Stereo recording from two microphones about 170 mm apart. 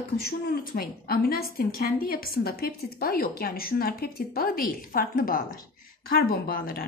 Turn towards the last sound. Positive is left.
turn(degrees=55)  # may be behind; listen again after turning